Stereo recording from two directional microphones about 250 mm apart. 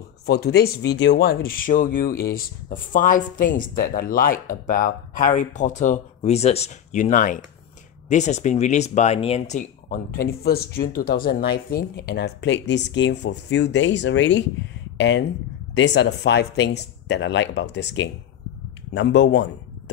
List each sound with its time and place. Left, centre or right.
0.3 s speech: left